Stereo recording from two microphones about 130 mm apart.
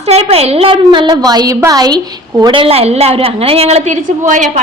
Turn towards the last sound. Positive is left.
turn(degrees=-70)  # may be behind; listen again after turning